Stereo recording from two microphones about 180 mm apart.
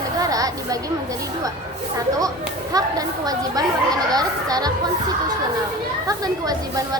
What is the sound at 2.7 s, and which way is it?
Speech, 20° right (ahead or behind).